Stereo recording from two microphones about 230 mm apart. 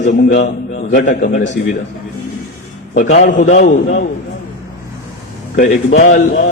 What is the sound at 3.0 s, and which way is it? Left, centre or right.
Speech, left.